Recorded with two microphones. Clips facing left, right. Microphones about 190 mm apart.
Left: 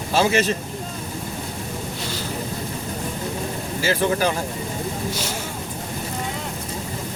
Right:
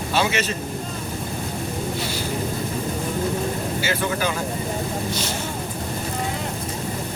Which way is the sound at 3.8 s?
35° left (ahead or behind).